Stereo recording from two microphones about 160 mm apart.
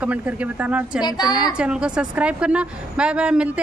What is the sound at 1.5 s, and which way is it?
A woman's voice, 5° right (ahead or behind).